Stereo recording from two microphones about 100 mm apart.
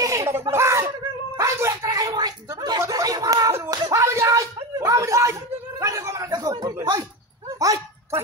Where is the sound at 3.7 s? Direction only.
35° right (ahead or behind).